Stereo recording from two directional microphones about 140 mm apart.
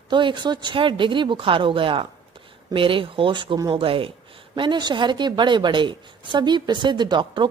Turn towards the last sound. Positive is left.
turn(degrees=-35)  # may be behind; listen again after turning